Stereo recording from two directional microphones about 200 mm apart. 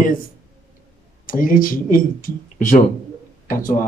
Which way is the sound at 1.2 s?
45° left (ahead or behind).